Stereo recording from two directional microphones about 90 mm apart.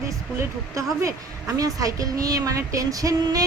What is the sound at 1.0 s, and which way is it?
A woman's voice, 40° right (ahead or behind).